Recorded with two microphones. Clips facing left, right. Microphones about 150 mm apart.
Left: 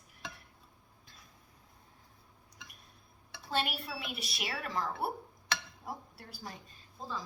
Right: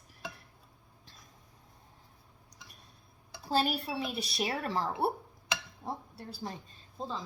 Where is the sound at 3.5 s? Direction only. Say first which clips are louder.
Right 5 dB; 35° right (ahead or behind).